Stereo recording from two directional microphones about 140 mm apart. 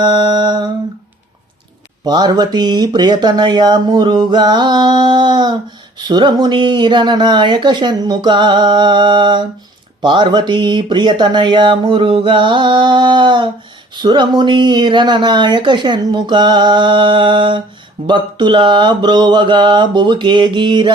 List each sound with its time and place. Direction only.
0.0 s speech: 30° right (ahead or behind)
2.0 s speech: 30° right (ahead or behind)